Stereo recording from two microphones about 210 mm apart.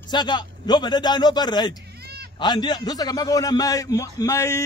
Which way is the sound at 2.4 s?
20° left (ahead or behind).